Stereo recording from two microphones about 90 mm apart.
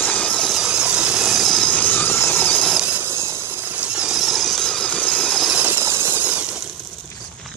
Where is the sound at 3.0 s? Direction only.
30° right (ahead or behind).